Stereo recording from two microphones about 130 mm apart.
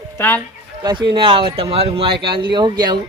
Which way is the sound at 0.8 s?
35° right (ahead or behind).